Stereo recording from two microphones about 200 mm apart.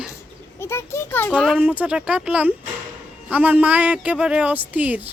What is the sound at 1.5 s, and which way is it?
Speech, 10° right (ahead or behind).